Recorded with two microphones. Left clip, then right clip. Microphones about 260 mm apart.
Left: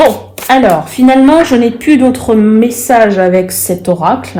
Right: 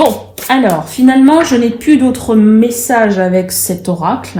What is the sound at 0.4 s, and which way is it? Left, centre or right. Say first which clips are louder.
Speech: left 4 dB; left.